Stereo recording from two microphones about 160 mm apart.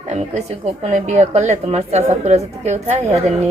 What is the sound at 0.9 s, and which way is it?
A woman's voice, 45° right (ahead or behind).